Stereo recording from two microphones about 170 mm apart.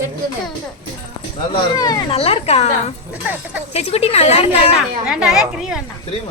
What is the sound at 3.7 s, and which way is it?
A woman's voice, 35° left (ahead or behind).